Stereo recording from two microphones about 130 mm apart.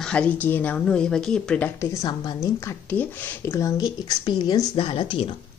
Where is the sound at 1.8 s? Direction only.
30° left (ahead or behind).